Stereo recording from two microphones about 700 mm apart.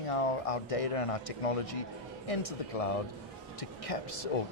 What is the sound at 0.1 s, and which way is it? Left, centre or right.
Speech, left.